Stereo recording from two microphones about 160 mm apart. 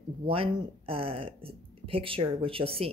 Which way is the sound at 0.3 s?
35° right (ahead or behind).